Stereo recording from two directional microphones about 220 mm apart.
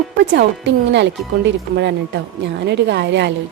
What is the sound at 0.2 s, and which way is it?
A woman's voice, 55° right (ahead or behind).